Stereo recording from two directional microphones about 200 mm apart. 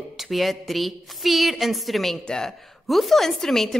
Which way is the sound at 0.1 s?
Centre (ahead or behind).